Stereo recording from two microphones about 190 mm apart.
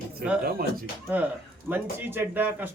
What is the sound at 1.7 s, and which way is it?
A man's voice, 10° right (ahead or behind).